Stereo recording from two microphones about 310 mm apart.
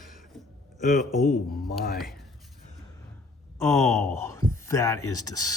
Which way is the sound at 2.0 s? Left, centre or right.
Centre.